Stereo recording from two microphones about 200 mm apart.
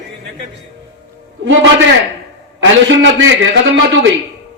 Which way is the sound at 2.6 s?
65° right (ahead or behind).